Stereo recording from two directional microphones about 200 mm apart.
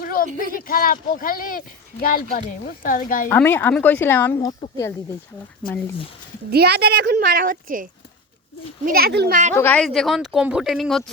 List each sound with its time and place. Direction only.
0.0 s a sound: 45° left (ahead or behind)
0.4 s speech: 45° left (ahead or behind)
3.2 s a woman's voice: 10° left (ahead or behind)
4.4 s speech: 20° left (ahead or behind)
6.5 s a child's voice: 55° right (ahead or behind)
9.6 s speech: 10° left (ahead or behind)